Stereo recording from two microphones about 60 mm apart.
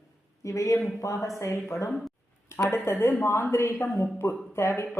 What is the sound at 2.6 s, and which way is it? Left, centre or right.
Speech, left.